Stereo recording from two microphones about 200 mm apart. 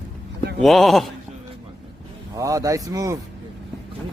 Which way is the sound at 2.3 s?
15° right (ahead or behind).